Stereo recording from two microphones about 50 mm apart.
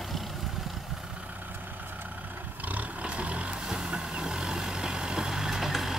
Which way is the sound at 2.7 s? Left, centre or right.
Right.